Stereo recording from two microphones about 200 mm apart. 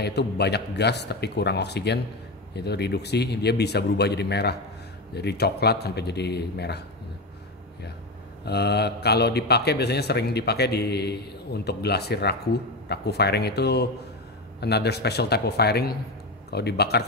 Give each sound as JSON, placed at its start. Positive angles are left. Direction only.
{"t": 0.0, "sound": "a man's voice", "side_deg": 55}
{"t": 8.5, "sound": "a man's voice", "side_deg": 55}